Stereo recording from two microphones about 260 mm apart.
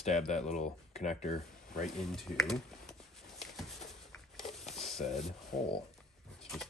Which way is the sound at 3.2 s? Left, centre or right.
Centre.